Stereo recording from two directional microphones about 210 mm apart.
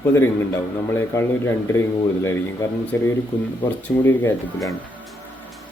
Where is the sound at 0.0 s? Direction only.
10° left (ahead or behind).